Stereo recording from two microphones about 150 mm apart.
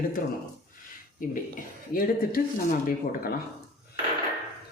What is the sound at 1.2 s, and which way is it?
Speech, 65° left (ahead or behind).